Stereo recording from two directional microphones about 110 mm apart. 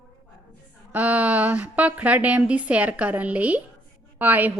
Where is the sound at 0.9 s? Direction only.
15° right (ahead or behind).